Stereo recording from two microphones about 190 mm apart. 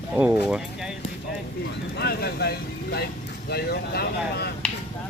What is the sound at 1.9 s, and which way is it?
Speech, 55° left (ahead or behind).